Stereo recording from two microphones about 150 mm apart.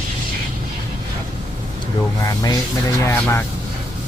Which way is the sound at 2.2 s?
25° left (ahead or behind).